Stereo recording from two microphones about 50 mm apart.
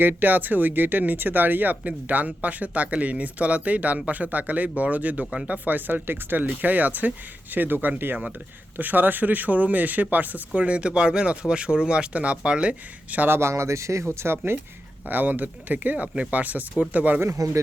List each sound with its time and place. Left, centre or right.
0.0 s speech: right
10.6 s speech: right
13.2 s speech: right
13.5 s speech: right
14.2 s speech: right
15.0 s speech: right
17.2 s speech: right